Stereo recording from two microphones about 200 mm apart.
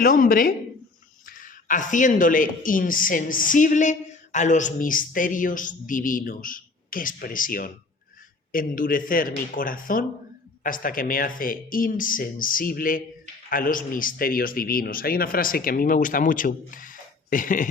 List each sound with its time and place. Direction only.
0.0 s speech: 45° left (ahead or behind)